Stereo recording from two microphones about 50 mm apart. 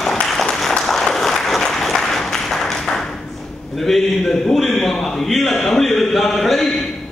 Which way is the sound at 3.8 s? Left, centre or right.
Centre.